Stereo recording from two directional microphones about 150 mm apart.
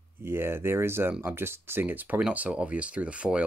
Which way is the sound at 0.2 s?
15° right (ahead or behind).